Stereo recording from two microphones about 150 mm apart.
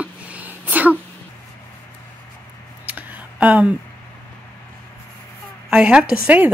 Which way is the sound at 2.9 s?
10° right (ahead or behind).